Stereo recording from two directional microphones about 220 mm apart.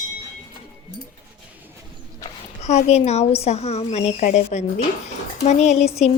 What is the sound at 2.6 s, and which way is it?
A woman's voice, 30° left (ahead or behind).